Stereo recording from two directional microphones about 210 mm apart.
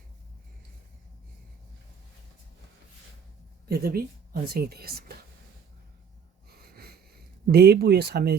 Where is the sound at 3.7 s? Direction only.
50° right (ahead or behind).